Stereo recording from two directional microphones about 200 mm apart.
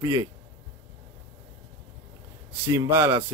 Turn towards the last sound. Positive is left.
turn(degrees=-15)  # may be behind; listen again after turning